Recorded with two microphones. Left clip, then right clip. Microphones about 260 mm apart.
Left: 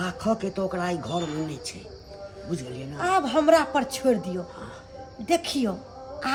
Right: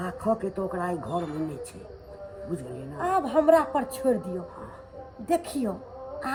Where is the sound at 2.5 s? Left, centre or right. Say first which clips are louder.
Left 2 dB; left.